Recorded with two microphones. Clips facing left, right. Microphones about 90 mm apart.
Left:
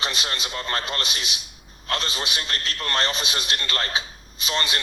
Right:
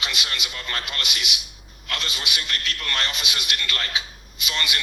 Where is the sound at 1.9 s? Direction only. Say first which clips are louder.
Left 3 dB; 35° left (ahead or behind).